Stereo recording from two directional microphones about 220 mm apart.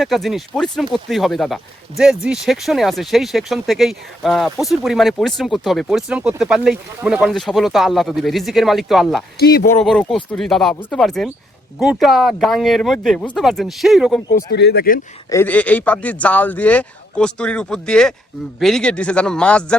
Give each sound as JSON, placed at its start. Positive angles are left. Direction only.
{"t": 0.0, "sound": "speech", "side_deg": 0}
{"t": 9.4, "sound": "speech", "side_deg": 45}
{"t": 9.6, "sound": "speech", "side_deg": 5}
{"t": 14.5, "sound": "speech", "side_deg": 50}
{"t": 15.3, "sound": "speech", "side_deg": 10}